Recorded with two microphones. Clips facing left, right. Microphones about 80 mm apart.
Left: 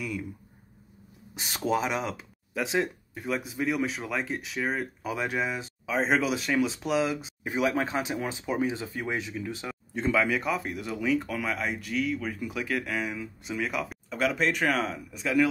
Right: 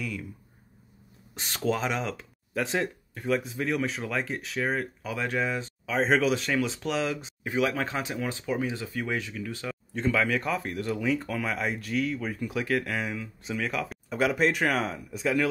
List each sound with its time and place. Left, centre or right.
0.0 s speech: centre
1.3 s speech: centre
5.0 s speech: centre
7.4 s speech: centre
10.1 s speech: centre
14.0 s speech: centre